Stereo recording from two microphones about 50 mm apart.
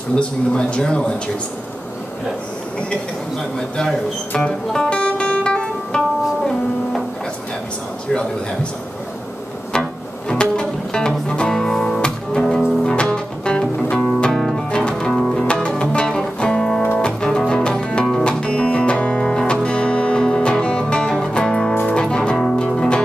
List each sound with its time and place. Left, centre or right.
0.1 s speech: centre
3.5 s a man's voice: centre
4.4 s music: left
5.9 s music: centre
10.3 s music: centre
14.3 s music: centre
14.7 s music: centre